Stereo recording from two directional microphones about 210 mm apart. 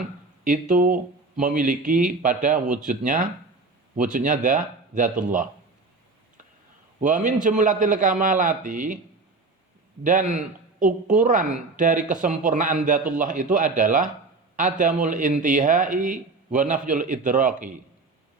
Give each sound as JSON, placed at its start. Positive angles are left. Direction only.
{"t": 0.4, "sound": "speech", "side_deg": -40}
{"t": 7.0, "sound": "speech", "side_deg": -35}
{"t": 10.0, "sound": "speech", "side_deg": -35}